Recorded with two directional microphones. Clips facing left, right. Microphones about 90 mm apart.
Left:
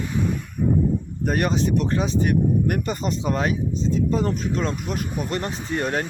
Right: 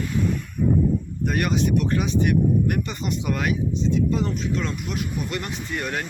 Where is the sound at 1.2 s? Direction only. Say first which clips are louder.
Left 2 dB; 35° left (ahead or behind).